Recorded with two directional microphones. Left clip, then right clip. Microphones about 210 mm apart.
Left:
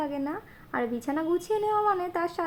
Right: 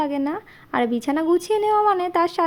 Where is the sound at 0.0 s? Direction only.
40° right (ahead or behind).